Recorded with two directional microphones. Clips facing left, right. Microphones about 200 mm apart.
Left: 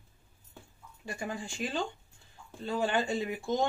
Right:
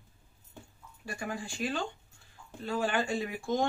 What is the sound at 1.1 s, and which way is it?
Speech, 20° left (ahead or behind).